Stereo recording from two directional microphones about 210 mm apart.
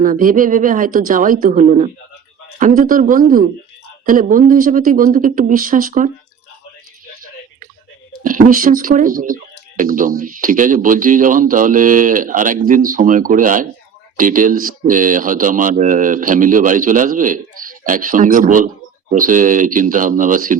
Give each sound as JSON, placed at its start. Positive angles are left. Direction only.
{"t": 0.0, "sound": "speech", "side_deg": -40}
{"t": 8.2, "sound": "speech", "side_deg": -40}